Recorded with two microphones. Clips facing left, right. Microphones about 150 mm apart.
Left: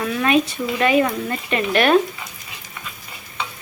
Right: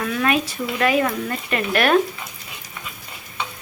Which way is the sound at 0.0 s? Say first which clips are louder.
Left 3 dB; 5° left (ahead or behind).